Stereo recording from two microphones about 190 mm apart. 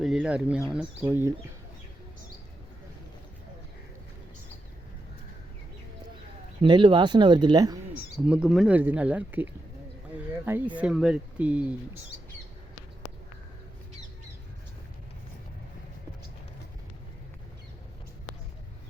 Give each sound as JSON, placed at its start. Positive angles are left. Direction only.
{"t": 0.0, "sound": "speech", "side_deg": -5}
{"t": 6.6, "sound": "speech", "side_deg": -25}
{"t": 8.3, "sound": "speech", "side_deg": -5}